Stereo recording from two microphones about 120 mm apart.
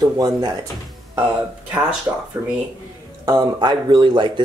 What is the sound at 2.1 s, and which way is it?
Speech, 20° right (ahead or behind).